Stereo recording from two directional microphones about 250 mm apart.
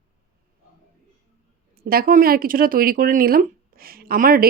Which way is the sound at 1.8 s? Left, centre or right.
Right.